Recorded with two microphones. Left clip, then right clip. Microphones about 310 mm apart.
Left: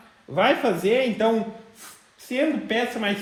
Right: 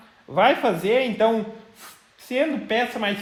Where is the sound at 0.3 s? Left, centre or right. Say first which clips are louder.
Right 2 dB; right.